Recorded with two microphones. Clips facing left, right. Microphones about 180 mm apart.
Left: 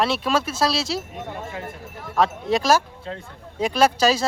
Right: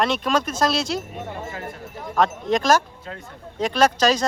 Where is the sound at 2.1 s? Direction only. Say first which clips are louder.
Even; 5° left (ahead or behind).